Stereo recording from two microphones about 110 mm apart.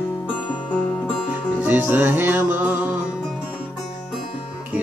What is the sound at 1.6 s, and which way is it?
Music, 15° right (ahead or behind).